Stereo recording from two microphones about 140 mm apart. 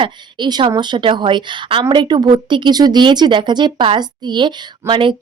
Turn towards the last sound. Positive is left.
turn(degrees=-35)  # may be behind; listen again after turning